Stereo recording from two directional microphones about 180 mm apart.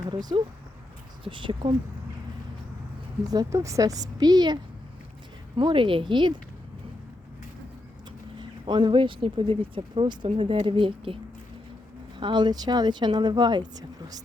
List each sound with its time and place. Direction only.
0.1 s speech: 25° right (ahead or behind)
3.2 s speech: 20° right (ahead or behind)
8.4 s speech: 25° right (ahead or behind)
12.2 s speech: 25° right (ahead or behind)